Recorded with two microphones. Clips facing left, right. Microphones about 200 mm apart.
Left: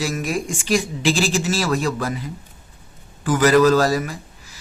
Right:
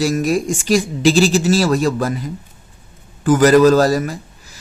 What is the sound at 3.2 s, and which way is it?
Speech, 45° right (ahead or behind).